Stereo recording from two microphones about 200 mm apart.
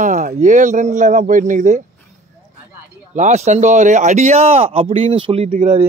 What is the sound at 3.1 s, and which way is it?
Speech, 35° right (ahead or behind).